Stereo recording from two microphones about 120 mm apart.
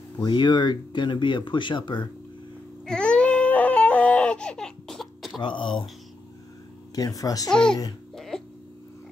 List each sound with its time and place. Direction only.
0.2 s speech: 40° left (ahead or behind)
2.8 s crying: 5° left (ahead or behind)
5.4 s speech: 40° left (ahead or behind)
7.0 s speech: 30° left (ahead or behind)
7.4 s speech: 5° left (ahead or behind)